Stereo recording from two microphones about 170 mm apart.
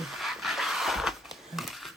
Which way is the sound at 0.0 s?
Centre (ahead or behind).